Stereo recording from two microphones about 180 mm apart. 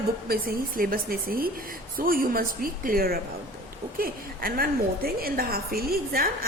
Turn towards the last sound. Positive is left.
turn(degrees=-55)  # may be behind; listen again after turning